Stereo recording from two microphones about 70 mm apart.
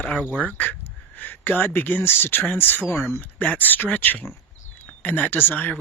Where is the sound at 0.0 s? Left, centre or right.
Left.